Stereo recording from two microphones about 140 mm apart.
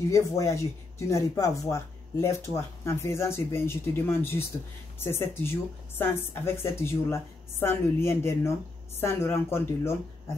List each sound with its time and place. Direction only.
0.1 s speech: 20° left (ahead or behind)